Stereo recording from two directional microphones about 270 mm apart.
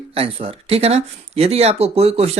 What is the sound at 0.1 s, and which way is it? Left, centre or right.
Speech, right.